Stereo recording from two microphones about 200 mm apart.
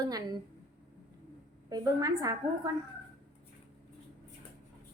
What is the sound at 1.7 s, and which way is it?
Speech, 20° right (ahead or behind).